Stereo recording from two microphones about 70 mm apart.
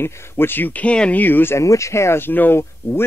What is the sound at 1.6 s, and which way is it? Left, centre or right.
Speech, left.